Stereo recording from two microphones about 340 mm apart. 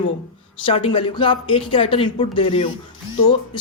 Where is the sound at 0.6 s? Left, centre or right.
Centre.